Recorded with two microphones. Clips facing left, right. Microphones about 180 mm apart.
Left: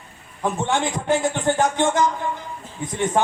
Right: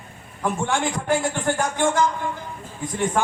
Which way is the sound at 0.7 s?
20° left (ahead or behind).